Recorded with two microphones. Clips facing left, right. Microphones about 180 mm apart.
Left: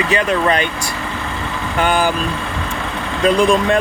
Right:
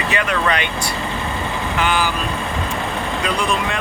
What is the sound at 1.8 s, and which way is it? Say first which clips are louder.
Speech: left 5 dB; 50° left (ahead or behind).